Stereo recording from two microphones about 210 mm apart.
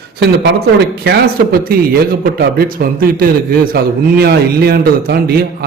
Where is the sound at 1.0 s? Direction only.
50° right (ahead or behind).